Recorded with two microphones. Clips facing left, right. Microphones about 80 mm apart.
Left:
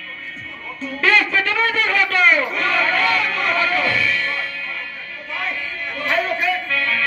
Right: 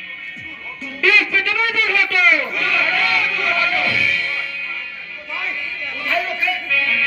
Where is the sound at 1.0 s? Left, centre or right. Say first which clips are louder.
Even; left.